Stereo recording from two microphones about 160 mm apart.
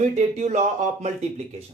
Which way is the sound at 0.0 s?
45° right (ahead or behind).